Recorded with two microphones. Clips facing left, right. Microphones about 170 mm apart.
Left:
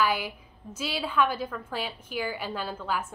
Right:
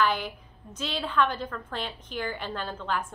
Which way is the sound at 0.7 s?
10° left (ahead or behind).